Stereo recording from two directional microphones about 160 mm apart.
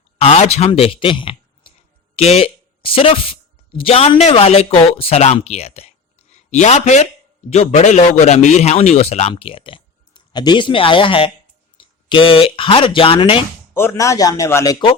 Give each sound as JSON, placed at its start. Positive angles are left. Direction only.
{"t": 0.2, "sound": "a man's voice", "side_deg": 40}
{"t": 13.7, "sound": "a man's voice", "side_deg": 15}